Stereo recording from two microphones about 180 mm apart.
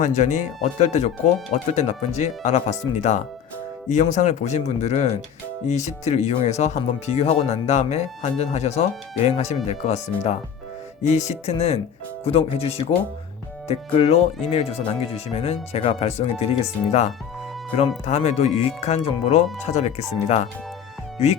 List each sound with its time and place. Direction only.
0.0 s speech: 40° left (ahead or behind)